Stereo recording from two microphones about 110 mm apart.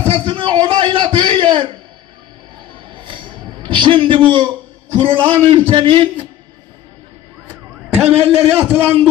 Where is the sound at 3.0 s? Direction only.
50° right (ahead or behind).